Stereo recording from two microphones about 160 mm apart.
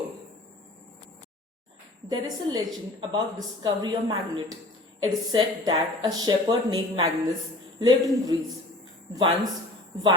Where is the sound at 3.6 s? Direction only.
25° right (ahead or behind).